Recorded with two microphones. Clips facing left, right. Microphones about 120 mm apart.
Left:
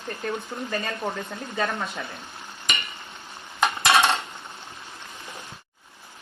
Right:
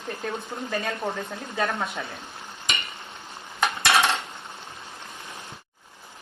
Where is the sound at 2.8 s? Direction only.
25° right (ahead or behind).